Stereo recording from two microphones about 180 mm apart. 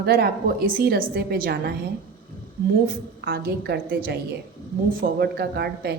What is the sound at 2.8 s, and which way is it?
A woman's voice, 55° right (ahead or behind).